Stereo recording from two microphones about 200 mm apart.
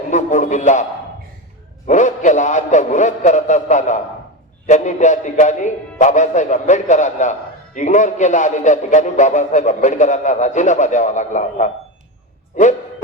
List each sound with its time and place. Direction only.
0.1 s speech: 40° left (ahead or behind)
1.9 s speech: 40° left (ahead or behind)